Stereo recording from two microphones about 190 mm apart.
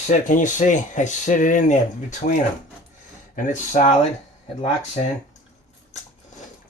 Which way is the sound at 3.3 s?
40° left (ahead or behind).